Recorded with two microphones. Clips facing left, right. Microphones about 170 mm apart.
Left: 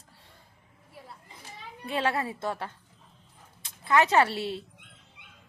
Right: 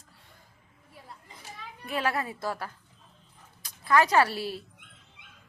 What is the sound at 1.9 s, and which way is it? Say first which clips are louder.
A woman's voice: left 1 dB; 25° left (ahead or behind).